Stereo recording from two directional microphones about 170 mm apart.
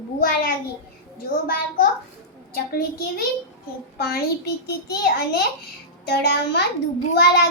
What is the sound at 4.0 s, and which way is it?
A child's voice, 70° left (ahead or behind).